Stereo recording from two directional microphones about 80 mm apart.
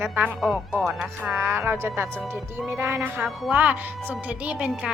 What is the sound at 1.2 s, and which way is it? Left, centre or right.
A woman's voice, right.